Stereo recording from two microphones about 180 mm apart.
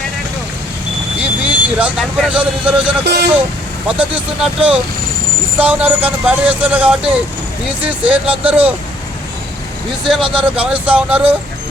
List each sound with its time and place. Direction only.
1.2 s speech: 10° right (ahead or behind)
3.0 s speech: 65° right (ahead or behind)
4.4 s speech: 5° right (ahead or behind)
10.3 s speech: 5° right (ahead or behind)